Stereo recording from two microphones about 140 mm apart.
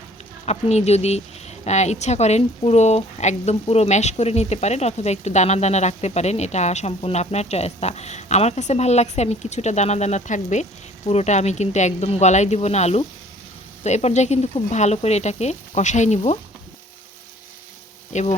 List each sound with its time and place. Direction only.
0.4 s a woman's voice: 50° left (ahead or behind)
18.1 s speech: 55° left (ahead or behind)